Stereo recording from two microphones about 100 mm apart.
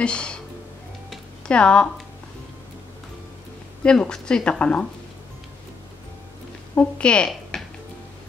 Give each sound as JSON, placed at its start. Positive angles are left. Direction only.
{"t": 0.0, "sound": "speech", "side_deg": 10}
{"t": 1.5, "sound": "a woman's voice", "side_deg": 10}
{"t": 3.8, "sound": "a woman's voice", "side_deg": 10}
{"t": 6.7, "sound": "a woman's voice", "side_deg": 10}